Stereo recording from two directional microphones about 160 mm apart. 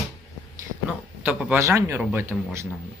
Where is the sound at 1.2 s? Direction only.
10° right (ahead or behind).